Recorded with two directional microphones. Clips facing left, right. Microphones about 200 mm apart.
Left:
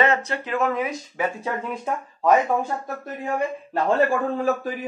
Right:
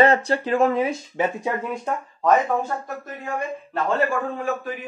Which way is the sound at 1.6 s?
5° left (ahead or behind).